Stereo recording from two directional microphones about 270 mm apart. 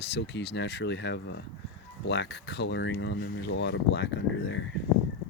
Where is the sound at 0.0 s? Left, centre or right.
Left.